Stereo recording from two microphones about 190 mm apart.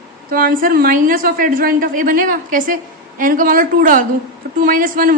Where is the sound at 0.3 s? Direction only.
50° right (ahead or behind).